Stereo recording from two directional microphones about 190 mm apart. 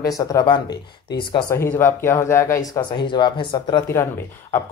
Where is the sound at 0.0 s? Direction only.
20° left (ahead or behind).